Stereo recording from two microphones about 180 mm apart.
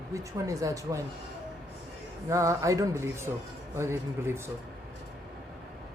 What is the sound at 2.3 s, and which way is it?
Speech, 15° right (ahead or behind).